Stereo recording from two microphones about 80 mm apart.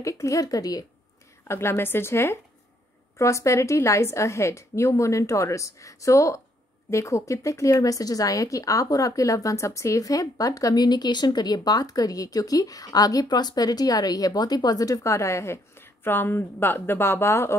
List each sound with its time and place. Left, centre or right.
0.0 s speech: left
1.5 s a woman's voice: left